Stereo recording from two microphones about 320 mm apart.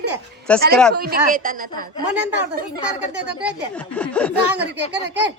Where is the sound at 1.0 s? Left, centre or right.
Right.